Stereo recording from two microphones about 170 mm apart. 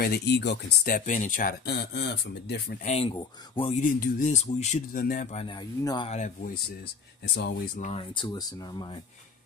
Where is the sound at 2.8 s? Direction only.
40° left (ahead or behind).